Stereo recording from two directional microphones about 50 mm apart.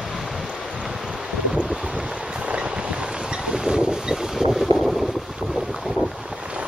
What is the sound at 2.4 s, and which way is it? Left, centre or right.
Boat, right.